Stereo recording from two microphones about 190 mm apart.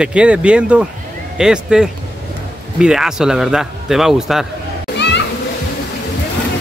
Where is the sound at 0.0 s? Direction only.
5° right (ahead or behind).